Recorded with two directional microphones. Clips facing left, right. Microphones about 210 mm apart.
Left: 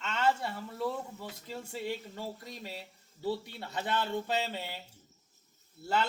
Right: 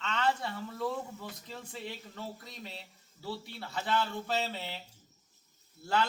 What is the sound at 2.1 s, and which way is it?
A man's voice, 10° left (ahead or behind).